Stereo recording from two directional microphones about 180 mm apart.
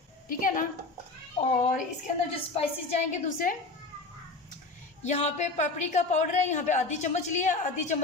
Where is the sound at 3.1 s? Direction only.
45° left (ahead or behind).